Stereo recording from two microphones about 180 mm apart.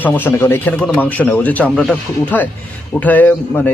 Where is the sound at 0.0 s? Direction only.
10° left (ahead or behind).